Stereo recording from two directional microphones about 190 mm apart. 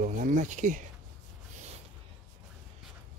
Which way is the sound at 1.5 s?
35° right (ahead or behind).